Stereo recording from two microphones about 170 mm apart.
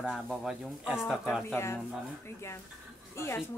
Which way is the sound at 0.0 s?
Centre (ahead or behind).